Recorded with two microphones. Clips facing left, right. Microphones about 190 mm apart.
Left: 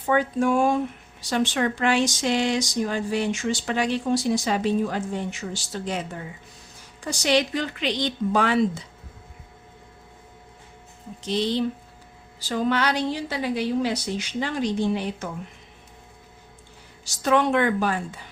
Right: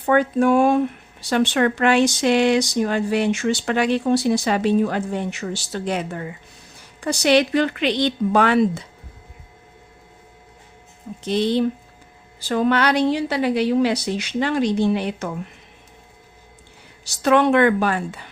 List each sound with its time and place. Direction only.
0.0 s speech: 65° right (ahead or behind)
11.2 s a woman's voice: 55° right (ahead or behind); by 15.3 s 70° right (ahead or behind)
17.0 s a woman's voice: 65° right (ahead or behind)